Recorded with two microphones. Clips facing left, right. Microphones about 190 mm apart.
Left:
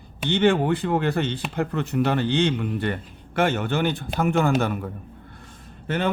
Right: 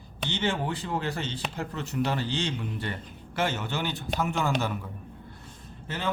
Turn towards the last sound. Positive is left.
turn(degrees=60)  # may be behind; listen again after turning